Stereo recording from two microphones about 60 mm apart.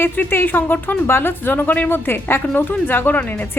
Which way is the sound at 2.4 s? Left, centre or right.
Left.